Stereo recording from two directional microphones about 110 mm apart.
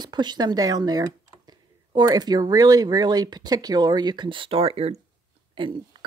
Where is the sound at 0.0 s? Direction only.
40° right (ahead or behind); by 4.9 s 65° right (ahead or behind).